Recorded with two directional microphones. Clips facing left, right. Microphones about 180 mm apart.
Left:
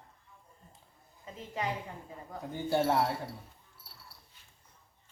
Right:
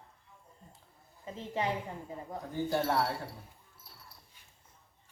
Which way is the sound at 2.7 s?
15° left (ahead or behind).